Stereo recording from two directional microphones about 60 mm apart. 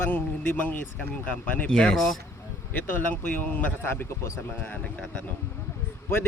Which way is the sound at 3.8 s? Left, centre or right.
Left.